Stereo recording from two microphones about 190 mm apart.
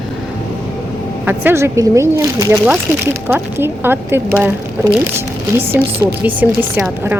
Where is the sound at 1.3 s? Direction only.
10° right (ahead or behind).